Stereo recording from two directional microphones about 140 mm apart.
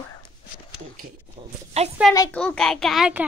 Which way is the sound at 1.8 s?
50° right (ahead or behind).